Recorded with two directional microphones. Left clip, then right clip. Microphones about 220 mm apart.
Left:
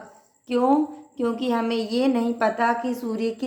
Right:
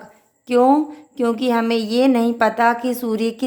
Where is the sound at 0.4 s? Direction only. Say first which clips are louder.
Right 6 dB; 45° right (ahead or behind).